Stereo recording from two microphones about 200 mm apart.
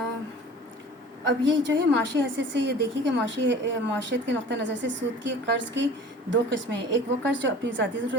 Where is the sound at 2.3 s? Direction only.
60° right (ahead or behind).